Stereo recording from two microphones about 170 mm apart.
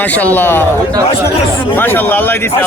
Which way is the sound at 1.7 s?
10° left (ahead or behind).